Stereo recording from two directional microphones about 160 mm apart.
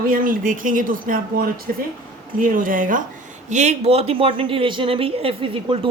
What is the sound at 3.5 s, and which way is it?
Speech, 45° right (ahead or behind).